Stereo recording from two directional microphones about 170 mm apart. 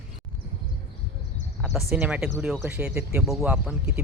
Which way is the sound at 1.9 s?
5° right (ahead or behind).